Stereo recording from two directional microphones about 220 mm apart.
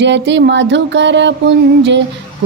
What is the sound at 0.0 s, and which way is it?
Mantra, 55° right (ahead or behind).